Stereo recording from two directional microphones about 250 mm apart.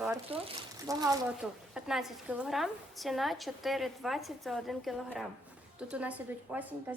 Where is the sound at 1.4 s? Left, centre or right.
Centre.